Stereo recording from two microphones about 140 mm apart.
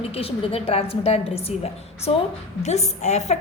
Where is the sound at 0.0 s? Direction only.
45° left (ahead or behind).